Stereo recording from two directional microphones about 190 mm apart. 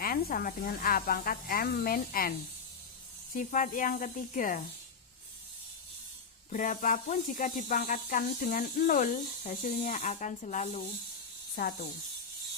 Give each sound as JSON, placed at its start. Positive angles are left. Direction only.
{"t": 0.0, "sound": "speech", "side_deg": 50}
{"t": 3.3, "sound": "speech", "side_deg": 45}
{"t": 6.5, "sound": "speech", "side_deg": 45}